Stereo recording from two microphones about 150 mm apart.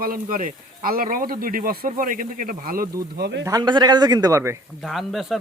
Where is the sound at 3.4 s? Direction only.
25° right (ahead or behind).